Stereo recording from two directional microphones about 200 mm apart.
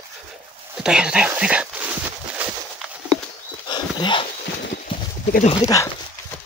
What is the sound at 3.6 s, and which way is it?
Dog, 20° left (ahead or behind).